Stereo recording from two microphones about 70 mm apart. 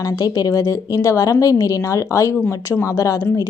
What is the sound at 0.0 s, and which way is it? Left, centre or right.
Speech, left.